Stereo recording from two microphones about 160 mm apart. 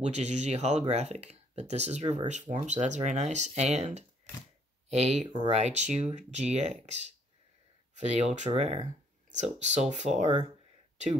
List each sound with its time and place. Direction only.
0.0 s speech: 45° right (ahead or behind)
5.3 s speech: 30° right (ahead or behind)
5.6 s speech: 45° right (ahead or behind)